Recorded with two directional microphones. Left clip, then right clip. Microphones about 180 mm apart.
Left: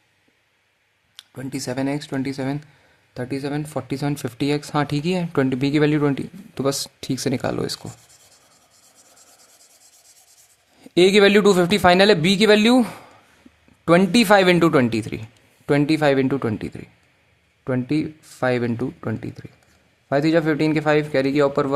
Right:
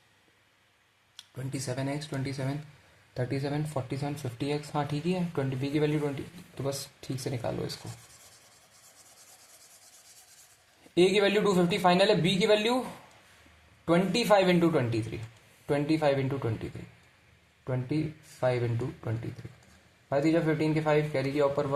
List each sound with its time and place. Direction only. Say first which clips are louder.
1.1 s speech: left 8 dB; 50° left (ahead or behind)
3.2 s speech: left 6 dB; 40° left (ahead or behind); by 7.9 s 55° left (ahead or behind)
10.9 s speech: left 10 dB; 50° left (ahead or behind)
13.8 s a man's voice: left 10 dB; 50° left (ahead or behind)
17.6 s a man's voice: left 10 dB; 55° left (ahead or behind)